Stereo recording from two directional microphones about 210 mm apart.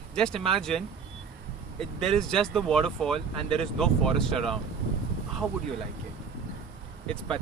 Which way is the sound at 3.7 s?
5° left (ahead or behind).